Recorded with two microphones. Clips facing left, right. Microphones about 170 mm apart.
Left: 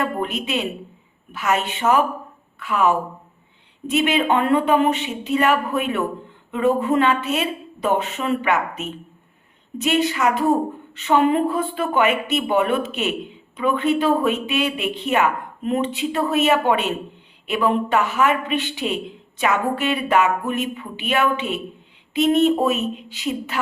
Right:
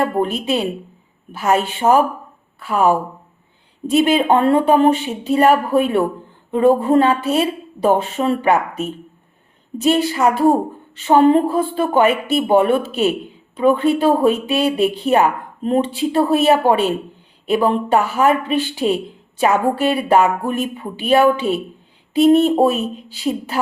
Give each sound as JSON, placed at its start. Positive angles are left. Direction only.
{"t": 0.0, "sound": "speech", "side_deg": -35}